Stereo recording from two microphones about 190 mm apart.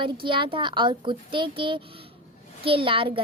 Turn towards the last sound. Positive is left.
turn(degrees=-30)  # may be behind; listen again after turning